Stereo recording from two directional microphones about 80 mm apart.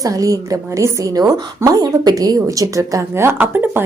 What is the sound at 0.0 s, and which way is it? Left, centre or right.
A woman's voice, right.